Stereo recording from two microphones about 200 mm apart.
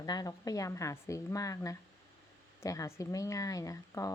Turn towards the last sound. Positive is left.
turn(degrees=15)  # may be behind; listen again after turning